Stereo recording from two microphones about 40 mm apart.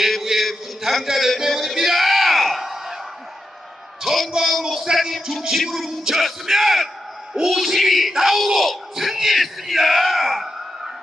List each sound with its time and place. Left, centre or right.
0.0 s a sound: centre
4.0 s a man's voice: centre
4.9 s music: right
6.1 s speech: centre